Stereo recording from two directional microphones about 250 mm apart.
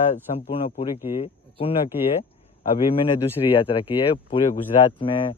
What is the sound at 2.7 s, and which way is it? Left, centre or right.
Speech, left.